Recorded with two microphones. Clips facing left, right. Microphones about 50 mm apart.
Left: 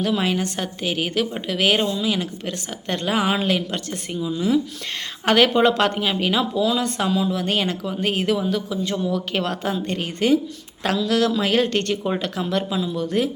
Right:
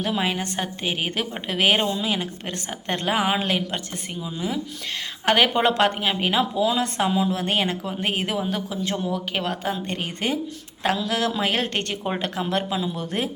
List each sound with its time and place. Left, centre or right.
0.0 s a woman's voice: centre; by 9.0 s right
9.0 s a woman's voice: centre
13.0 s speech: right